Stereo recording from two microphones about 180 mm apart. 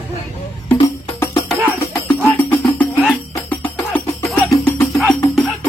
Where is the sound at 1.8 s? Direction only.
15° left (ahead or behind).